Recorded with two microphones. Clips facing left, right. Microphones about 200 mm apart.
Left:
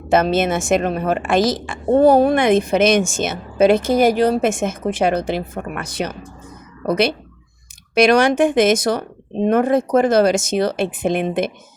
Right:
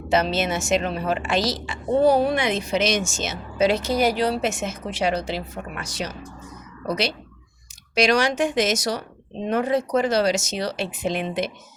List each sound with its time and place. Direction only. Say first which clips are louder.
0.1 s a woman's voice: left 6 dB; 50° left (ahead or behind)